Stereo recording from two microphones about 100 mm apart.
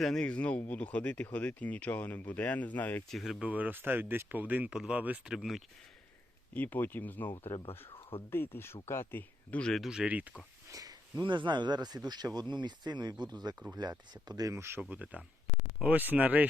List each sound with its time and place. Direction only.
0.0 s speech: 5° left (ahead or behind)
3.1 s speech: centre (ahead or behind)
3.4 s speech: 15° right (ahead or behind)
6.5 s speech: 20° left (ahead or behind); by 10.4 s 15° right (ahead or behind)
10.7 s a sound: 35° right (ahead or behind)
11.2 s speech: 50° right (ahead or behind)
14.5 s speech: 25° right (ahead or behind)
14.8 s speech: 10° right (ahead or behind)